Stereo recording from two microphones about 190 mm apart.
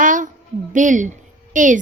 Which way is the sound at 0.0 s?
45° right (ahead or behind).